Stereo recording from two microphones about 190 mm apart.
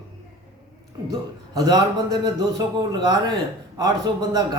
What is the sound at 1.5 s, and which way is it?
A man's voice, 20° right (ahead or behind).